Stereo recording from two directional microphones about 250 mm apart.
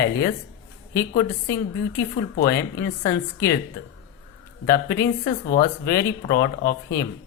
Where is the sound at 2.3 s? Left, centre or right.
Left.